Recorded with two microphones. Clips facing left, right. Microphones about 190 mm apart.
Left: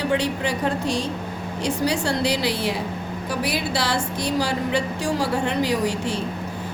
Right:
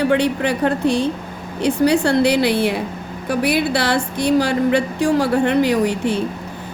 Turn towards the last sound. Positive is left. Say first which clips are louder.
# right 5 dB
turn(degrees=-60)  # may be behind; listen again after turning